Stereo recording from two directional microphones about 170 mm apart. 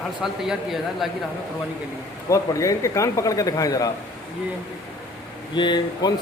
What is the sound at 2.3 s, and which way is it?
A man's voice, 20° left (ahead or behind).